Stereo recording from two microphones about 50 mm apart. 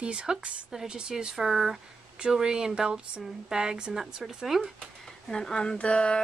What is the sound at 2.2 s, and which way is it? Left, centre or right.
Speech, centre.